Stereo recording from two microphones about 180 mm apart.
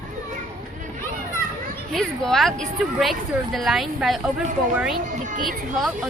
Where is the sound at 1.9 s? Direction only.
Centre (ahead or behind).